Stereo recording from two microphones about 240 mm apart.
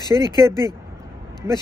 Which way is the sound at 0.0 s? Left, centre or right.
Centre.